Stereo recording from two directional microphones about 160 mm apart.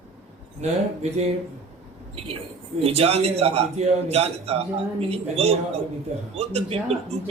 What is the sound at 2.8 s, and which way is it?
A man's voice, 40° right (ahead or behind).